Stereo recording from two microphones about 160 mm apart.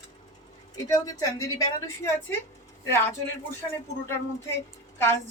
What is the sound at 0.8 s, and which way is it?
A woman's voice, 20° left (ahead or behind).